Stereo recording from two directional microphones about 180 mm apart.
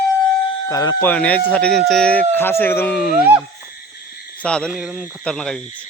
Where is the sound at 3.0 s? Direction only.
5° right (ahead or behind).